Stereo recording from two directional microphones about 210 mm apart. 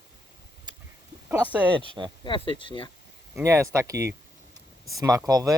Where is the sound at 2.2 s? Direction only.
25° left (ahead or behind).